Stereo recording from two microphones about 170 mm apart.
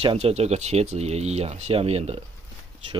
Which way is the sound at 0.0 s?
35° right (ahead or behind).